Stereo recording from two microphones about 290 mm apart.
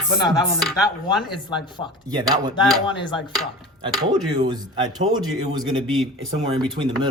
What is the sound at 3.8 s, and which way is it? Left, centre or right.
Speech, centre.